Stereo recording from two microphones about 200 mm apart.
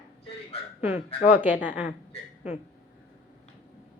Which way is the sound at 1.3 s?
10° right (ahead or behind).